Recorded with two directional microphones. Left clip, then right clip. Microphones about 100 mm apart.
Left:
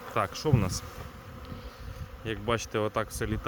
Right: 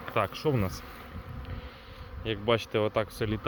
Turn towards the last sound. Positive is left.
turn(degrees=5)  # may be behind; listen again after turning